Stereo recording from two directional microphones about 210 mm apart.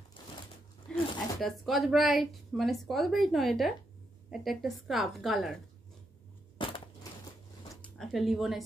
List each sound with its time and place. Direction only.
0.2 s a sound: 20° left (ahead or behind)
0.9 s zipper: 25° left (ahead or behind)
1.4 s a woman's voice: centre (ahead or behind)
6.6 s crushing: 25° left (ahead or behind)
7.7 s speech: 5° left (ahead or behind)